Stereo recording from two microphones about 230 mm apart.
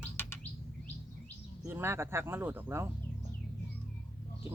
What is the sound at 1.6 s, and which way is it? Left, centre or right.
Speech, centre.